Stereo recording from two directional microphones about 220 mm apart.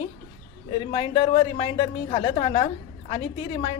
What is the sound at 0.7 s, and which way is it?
Speech, 25° left (ahead or behind).